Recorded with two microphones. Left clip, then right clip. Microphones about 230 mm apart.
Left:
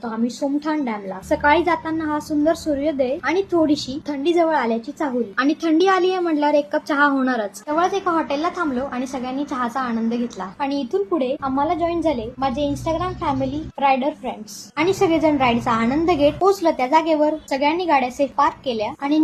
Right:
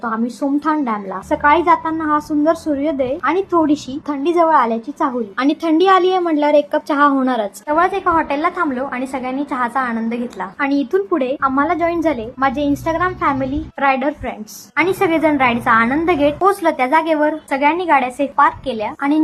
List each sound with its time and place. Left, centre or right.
0.6 s a woman's voice: centre